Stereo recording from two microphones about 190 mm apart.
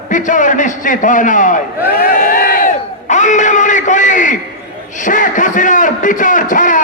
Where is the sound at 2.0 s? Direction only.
50° left (ahead or behind).